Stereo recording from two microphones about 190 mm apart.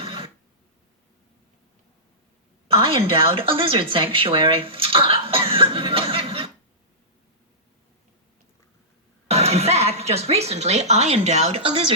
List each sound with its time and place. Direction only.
0.0 s a sound: 30° right (ahead or behind)
2.6 s a woman's voice: 30° right (ahead or behind)
9.2 s speech: 35° right (ahead or behind)